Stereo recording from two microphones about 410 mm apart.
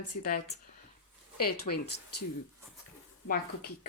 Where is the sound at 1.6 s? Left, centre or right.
Left.